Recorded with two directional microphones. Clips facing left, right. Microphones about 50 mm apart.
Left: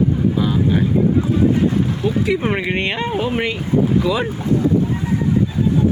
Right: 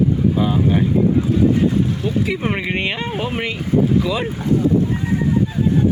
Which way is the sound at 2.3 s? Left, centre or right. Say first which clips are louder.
Left 2 dB; centre.